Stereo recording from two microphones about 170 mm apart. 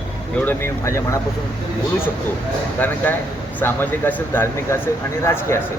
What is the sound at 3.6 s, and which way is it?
Speech, 10° left (ahead or behind).